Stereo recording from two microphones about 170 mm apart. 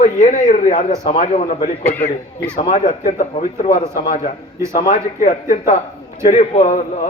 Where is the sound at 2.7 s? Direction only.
50° left (ahead or behind).